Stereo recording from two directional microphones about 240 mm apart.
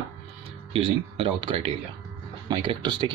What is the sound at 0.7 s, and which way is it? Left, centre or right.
Speech, right.